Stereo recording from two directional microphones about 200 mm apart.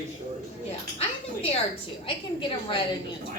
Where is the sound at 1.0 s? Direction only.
30° left (ahead or behind).